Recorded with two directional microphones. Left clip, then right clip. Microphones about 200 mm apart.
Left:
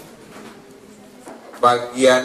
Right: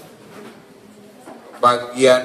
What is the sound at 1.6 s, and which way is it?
Speech, 45° right (ahead or behind).